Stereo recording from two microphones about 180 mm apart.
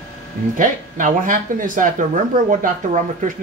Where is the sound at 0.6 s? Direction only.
45° right (ahead or behind).